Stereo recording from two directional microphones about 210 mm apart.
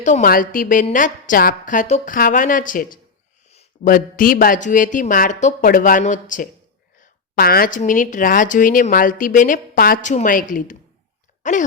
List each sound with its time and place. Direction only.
0.0 s speech: 35° left (ahead or behind)